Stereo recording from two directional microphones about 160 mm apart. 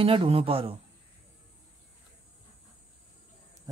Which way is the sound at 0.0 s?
35° right (ahead or behind).